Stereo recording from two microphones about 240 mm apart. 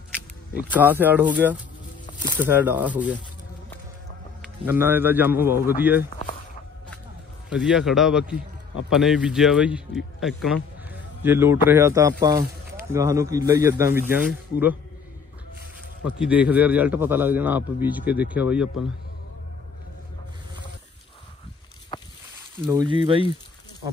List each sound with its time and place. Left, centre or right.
0.7 s speech: centre
4.6 s speech: centre
7.4 s a man's voice: centre
16.2 s a man's voice: centre
22.7 s speech: centre